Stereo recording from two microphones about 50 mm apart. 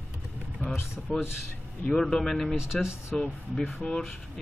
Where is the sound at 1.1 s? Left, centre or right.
Centre.